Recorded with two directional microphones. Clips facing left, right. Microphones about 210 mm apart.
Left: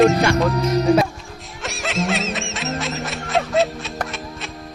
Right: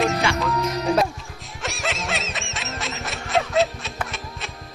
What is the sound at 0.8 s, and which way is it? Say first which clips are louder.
Music: left 4 dB; centre (ahead or behind).